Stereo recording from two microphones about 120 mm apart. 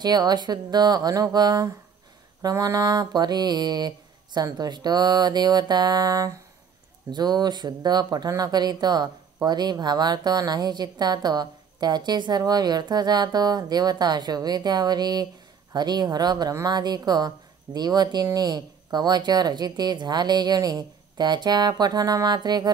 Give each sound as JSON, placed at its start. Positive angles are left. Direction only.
{"t": 0.0, "sound": "speech", "side_deg": -35}